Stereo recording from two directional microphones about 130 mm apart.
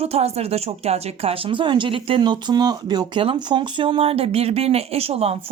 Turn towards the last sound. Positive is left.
turn(degrees=-50)  # may be behind; listen again after turning